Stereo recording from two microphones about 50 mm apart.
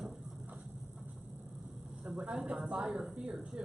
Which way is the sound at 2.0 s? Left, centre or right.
Right.